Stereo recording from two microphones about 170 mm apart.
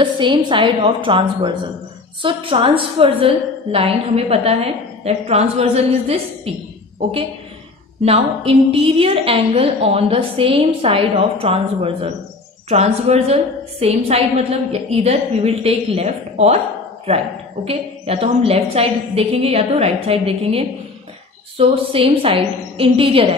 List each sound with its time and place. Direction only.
0.0 s a woman's voice: 30° right (ahead or behind)